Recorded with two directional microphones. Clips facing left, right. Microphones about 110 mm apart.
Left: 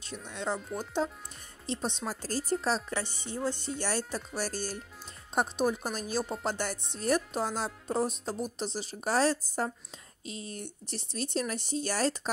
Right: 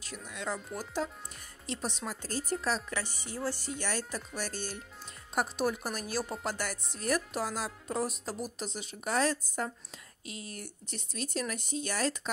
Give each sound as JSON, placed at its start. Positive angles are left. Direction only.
{"t": 0.3, "sound": "music", "side_deg": 30}
{"t": 2.0, "sound": "speech", "side_deg": 35}
{"t": 2.6, "sound": "music", "side_deg": 30}
{"t": 5.3, "sound": "music", "side_deg": 25}
{"t": 8.5, "sound": "speech", "side_deg": 30}